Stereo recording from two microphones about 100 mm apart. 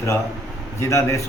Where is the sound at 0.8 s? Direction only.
30° left (ahead or behind).